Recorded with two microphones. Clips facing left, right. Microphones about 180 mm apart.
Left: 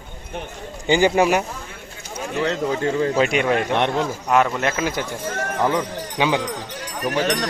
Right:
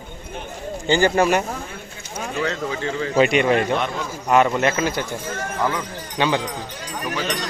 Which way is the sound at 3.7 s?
70° left (ahead or behind).